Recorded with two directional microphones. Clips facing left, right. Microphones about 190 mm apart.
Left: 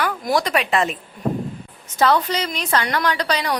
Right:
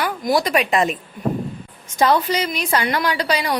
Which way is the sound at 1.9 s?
15° right (ahead or behind).